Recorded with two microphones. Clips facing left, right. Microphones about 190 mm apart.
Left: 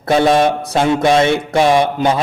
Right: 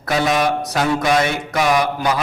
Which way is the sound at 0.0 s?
30° left (ahead or behind).